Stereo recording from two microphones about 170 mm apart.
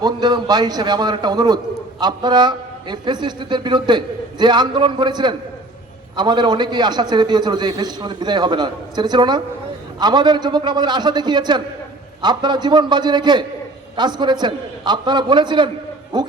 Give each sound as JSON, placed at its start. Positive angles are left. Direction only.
{"t": 0.0, "sound": "a man's voice", "side_deg": -25}